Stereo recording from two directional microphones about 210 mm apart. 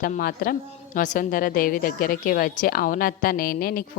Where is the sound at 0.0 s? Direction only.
45° left (ahead or behind).